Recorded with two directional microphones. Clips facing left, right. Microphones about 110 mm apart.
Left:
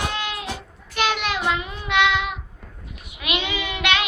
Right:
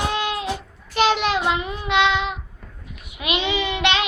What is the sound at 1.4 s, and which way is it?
Child singing, 20° right (ahead or behind).